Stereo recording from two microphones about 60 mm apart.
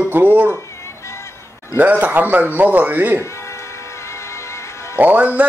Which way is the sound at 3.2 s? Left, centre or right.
Left.